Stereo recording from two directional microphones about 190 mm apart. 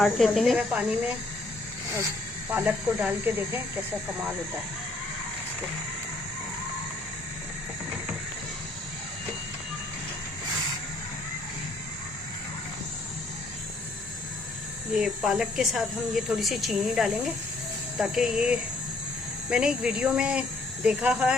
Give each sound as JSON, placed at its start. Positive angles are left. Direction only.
{"t": 0.0, "sound": "speech", "side_deg": 0}
{"t": 2.5, "sound": "speech", "side_deg": -5}
{"t": 14.9, "sound": "speech", "side_deg": 0}